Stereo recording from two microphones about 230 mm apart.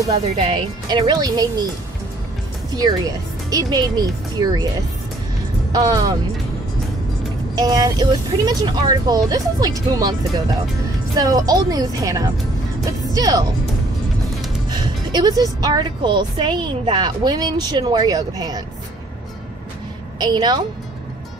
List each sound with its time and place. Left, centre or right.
0.0 s speech: right
3.4 s a woman's voice: centre
5.7 s speech: centre
7.5 s a woman's voice: centre
11.1 s a woman's voice: centre
12.8 s music: centre
14.7 s a woman's voice: centre
20.2 s speech: centre